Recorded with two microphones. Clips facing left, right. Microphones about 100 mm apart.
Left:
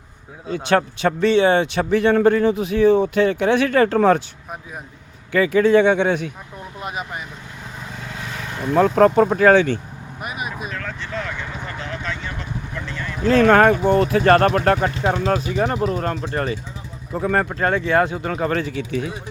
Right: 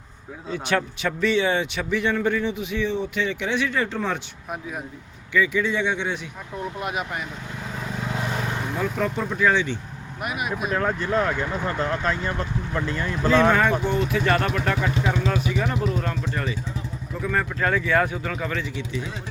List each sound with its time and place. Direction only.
0.7 s speech: 35° left (ahead or behind); by 4.2 s 50° left (ahead or behind)
5.3 s speech: 55° left (ahead or behind)
6.8 s speech: centre (ahead or behind)
8.7 s speech: 60° left (ahead or behind)
10.2 s speech: centre (ahead or behind)
10.7 s speech: 45° right (ahead or behind)
13.2 s speech: 55° left (ahead or behind)
15.0 s speech: 35° left (ahead or behind)
18.3 s speech: 40° left (ahead or behind); by 19.1 s 55° left (ahead or behind)